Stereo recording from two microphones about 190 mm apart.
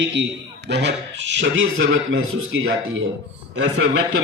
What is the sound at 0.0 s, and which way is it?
A man's voice, 70° right (ahead or behind).